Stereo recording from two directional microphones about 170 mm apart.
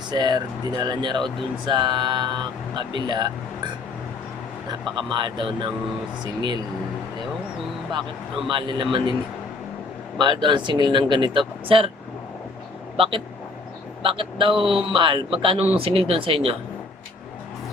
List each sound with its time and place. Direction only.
0.1 s speech: 25° right (ahead or behind)
4.7 s speech: 25° right (ahead or behind)
8.4 s speech: 30° right (ahead or behind)
10.2 s speech: 25° right (ahead or behind)
13.0 s a man's voice: 30° right (ahead or behind)